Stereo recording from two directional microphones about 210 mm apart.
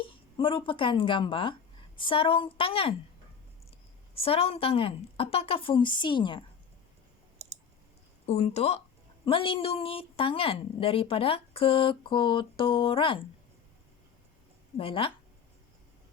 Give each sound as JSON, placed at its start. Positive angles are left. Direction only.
{"t": 0.1, "sound": "a woman's voice", "side_deg": 25}
{"t": 8.3, "sound": "a woman's voice", "side_deg": 30}
{"t": 14.8, "sound": "a woman's voice", "side_deg": 25}